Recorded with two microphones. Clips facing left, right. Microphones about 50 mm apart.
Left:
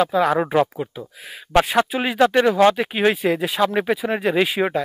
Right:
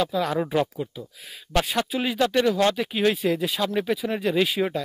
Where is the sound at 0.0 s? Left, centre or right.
Left.